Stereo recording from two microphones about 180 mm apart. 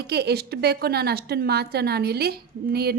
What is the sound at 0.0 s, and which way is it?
A woman's voice, 65° right (ahead or behind).